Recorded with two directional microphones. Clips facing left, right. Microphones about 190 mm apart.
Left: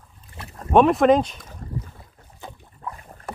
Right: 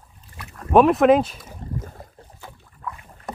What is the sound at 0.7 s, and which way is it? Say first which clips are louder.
Speech: right 1 dB; 5° right (ahead or behind).